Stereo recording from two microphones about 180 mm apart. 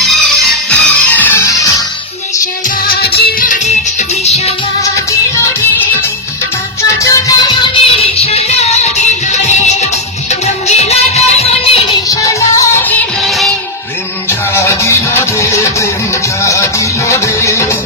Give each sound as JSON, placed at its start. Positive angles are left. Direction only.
{"t": 0.0, "sound": "music", "side_deg": 0}
{"t": 2.9, "sound": "music", "side_deg": 60}
{"t": 4.8, "sound": "music", "side_deg": 15}
{"t": 7.0, "sound": "music", "side_deg": 20}
{"t": 12.1, "sound": "music", "side_deg": 20}
{"t": 13.2, "sound": "music", "side_deg": 0}
{"t": 14.5, "sound": "music", "side_deg": 15}